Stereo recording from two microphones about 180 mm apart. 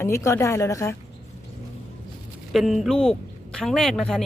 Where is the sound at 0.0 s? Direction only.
15° left (ahead or behind).